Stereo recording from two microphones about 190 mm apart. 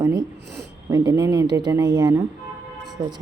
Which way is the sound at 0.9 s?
20° right (ahead or behind).